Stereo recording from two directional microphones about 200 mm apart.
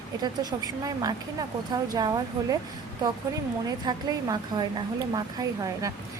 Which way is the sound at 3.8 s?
20° right (ahead or behind).